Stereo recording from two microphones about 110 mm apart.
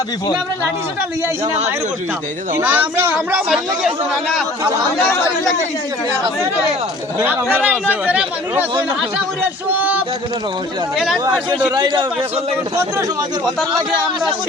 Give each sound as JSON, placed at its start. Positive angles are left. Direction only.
{"t": 2.6, "sound": "speech", "side_deg": -15}
{"t": 7.2, "sound": "speech", "side_deg": -15}
{"t": 9.7, "sound": "a sound", "side_deg": -15}
{"t": 10.9, "sound": "a man's voice", "side_deg": 0}
{"t": 11.7, "sound": "a man's voice", "side_deg": -40}
{"t": 13.4, "sound": "a man's voice", "side_deg": 0}